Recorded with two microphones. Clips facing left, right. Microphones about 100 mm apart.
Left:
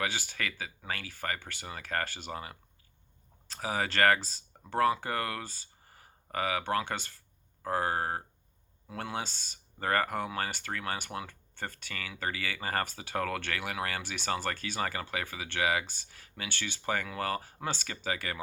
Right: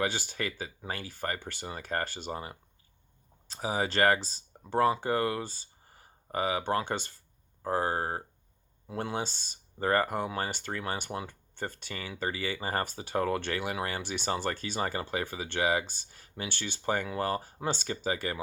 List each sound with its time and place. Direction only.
0.0 s speech: 30° right (ahead or behind)